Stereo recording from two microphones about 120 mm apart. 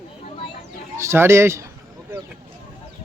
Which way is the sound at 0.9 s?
20° right (ahead or behind).